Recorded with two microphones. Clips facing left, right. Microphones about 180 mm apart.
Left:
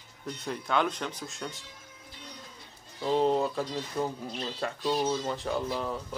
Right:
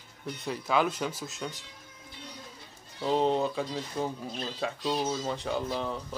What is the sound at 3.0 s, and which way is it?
Speech, centre (ahead or behind).